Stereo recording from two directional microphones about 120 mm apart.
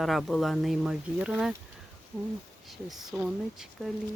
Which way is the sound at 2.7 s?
Centre (ahead or behind).